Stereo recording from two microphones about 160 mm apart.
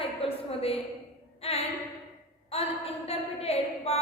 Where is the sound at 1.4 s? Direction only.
40° left (ahead or behind).